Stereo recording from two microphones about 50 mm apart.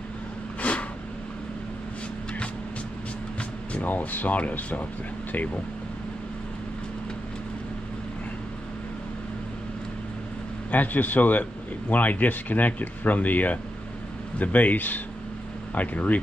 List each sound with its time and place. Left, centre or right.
0.6 s a sound: left
3.7 s speech: left
10.7 s speech: left